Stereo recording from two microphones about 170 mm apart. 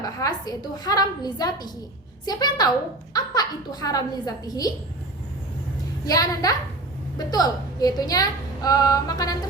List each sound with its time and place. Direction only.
0.0 s a woman's voice: 20° left (ahead or behind)
6.1 s a woman's voice: 20° left (ahead or behind)